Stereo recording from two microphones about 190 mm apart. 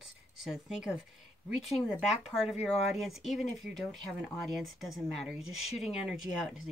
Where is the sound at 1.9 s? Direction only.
5° right (ahead or behind).